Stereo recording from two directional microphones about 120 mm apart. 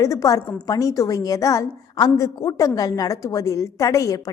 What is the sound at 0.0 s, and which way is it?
A woman's voice, 30° left (ahead or behind).